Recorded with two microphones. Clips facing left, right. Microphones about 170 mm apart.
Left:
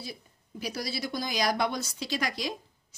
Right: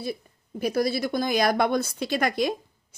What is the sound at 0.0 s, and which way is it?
Speech, 55° right (ahead or behind).